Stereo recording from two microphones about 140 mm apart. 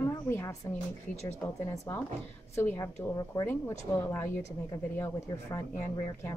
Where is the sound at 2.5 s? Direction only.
20° left (ahead or behind).